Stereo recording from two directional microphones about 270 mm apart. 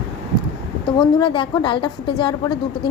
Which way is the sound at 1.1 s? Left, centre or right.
Centre.